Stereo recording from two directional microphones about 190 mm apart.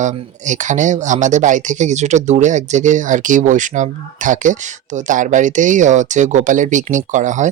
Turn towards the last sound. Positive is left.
turn(degrees=-40)  # may be behind; listen again after turning